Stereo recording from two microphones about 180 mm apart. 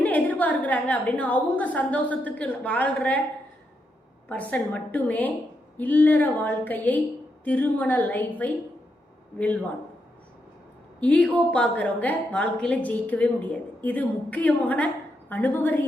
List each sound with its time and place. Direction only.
0.0 s a woman's voice: 10° left (ahead or behind)
4.3 s a woman's voice: 10° left (ahead or behind)
11.0 s a woman's voice: 10° left (ahead or behind)